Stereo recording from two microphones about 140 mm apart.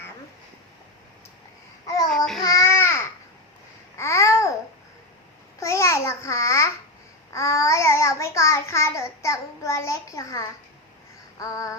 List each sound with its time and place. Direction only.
2.0 s child singing: 5° left (ahead or behind)
2.4 s babbling: 25° left (ahead or behind)
5.5 s babbling: 20° left (ahead or behind)
7.3 s child singing: 20° left (ahead or behind)
11.3 s music: 25° left (ahead or behind)